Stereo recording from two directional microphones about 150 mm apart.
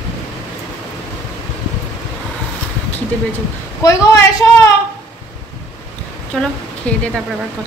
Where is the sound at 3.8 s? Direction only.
20° left (ahead or behind).